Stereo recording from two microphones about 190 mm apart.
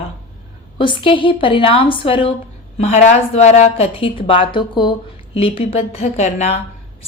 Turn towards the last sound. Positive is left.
turn(degrees=35)  # may be behind; listen again after turning